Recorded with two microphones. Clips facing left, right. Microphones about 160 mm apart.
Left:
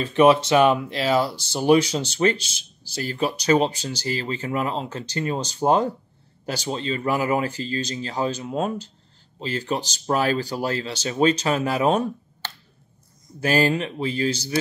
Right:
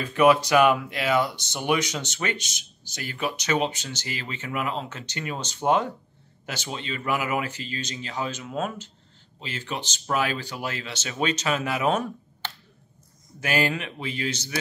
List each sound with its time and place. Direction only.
0.0 s speech: 25° left (ahead or behind)
13.4 s speech: 35° left (ahead or behind)